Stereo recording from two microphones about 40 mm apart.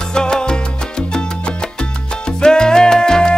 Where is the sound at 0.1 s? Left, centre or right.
Centre.